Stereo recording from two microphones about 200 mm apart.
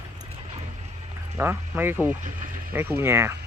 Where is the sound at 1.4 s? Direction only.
10° right (ahead or behind).